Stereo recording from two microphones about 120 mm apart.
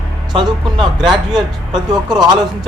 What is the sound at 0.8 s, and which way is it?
Speech, 5° right (ahead or behind).